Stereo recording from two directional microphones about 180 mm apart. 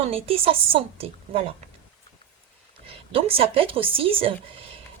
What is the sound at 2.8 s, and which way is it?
A woman's voice, 30° right (ahead or behind).